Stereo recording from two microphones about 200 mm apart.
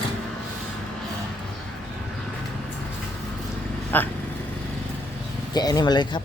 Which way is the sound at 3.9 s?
10° left (ahead or behind).